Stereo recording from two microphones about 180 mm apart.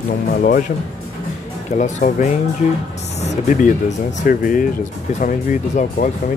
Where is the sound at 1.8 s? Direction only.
45° left (ahead or behind).